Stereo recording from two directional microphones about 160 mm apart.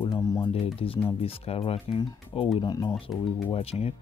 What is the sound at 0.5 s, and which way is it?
Speech, 35° left (ahead or behind).